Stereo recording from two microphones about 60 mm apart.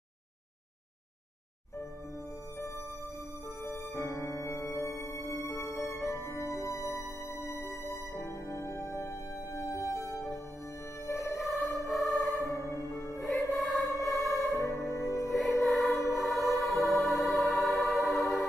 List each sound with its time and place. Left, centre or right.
3.6 s music: left
11.3 s music: centre
12.4 s music: left
13.5 s music: centre
14.5 s music: left
14.8 s music: left
15.6 s choir: centre
16.1 s music: centre